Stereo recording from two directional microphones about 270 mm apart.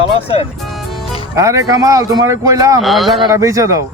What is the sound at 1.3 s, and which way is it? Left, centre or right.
Speech, centre.